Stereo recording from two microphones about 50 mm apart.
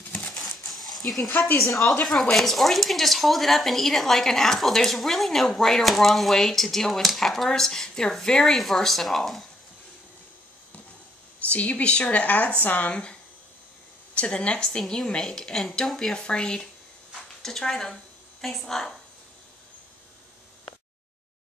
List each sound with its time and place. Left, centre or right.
0.4 s dog: centre
2.0 s speech: centre
11.5 s speech: left
14.1 s a woman's voice: left; by 18.9 s centre